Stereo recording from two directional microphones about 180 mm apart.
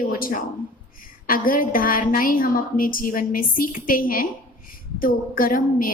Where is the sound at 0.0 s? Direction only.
50° left (ahead or behind).